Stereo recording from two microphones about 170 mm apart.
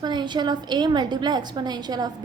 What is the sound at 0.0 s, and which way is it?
A woman's voice, 25° right (ahead or behind).